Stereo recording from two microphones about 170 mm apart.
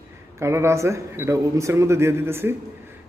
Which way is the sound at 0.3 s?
15° right (ahead or behind).